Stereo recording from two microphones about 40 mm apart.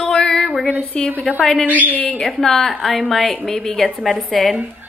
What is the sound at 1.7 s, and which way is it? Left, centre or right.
Speech, right.